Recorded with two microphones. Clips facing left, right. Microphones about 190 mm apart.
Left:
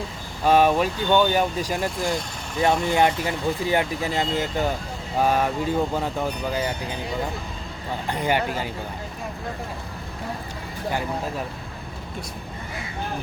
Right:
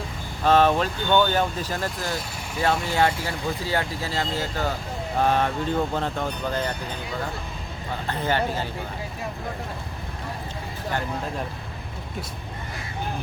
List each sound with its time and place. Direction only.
0.4 s speech: 10° left (ahead or behind)
2.0 s speech: centre (ahead or behind)
2.6 s speech: 20° left (ahead or behind)
8.0 s speech: 15° left (ahead or behind)